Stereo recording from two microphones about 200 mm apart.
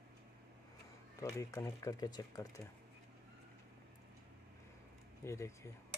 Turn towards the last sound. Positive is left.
turn(degrees=15)  # may be behind; listen again after turning